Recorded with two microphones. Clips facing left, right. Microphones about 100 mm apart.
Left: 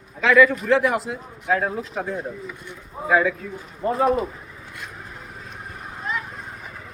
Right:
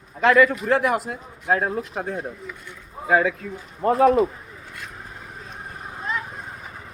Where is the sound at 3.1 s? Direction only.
60° right (ahead or behind).